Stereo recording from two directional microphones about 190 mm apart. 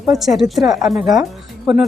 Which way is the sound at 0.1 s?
Centre (ahead or behind).